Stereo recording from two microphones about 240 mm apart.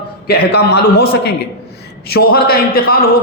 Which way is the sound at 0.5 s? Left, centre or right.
Left.